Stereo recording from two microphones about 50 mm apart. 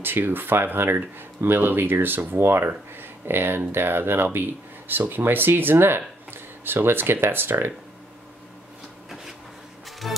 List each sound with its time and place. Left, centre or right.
0.0 s speech: right
9.8 s music: centre